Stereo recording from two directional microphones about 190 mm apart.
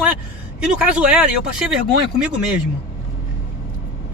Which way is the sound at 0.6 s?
5° right (ahead or behind).